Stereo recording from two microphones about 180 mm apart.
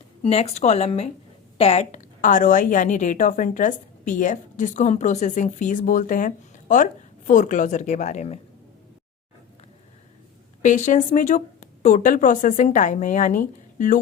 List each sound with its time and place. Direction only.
0.2 s a woman's voice: 35° left (ahead or behind)
10.6 s a woman's voice: 45° left (ahead or behind)